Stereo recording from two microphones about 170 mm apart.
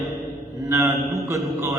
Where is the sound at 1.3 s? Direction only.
15° right (ahead or behind).